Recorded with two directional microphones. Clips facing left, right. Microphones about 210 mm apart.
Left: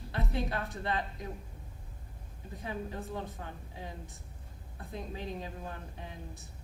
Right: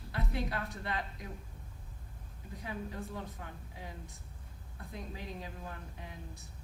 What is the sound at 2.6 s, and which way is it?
A woman's voice, 30° left (ahead or behind).